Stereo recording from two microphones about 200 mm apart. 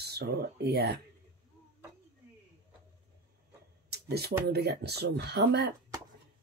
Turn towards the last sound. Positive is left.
turn(degrees=-55)  # may be behind; listen again after turning